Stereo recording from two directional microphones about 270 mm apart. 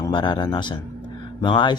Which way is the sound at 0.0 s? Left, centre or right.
Centre.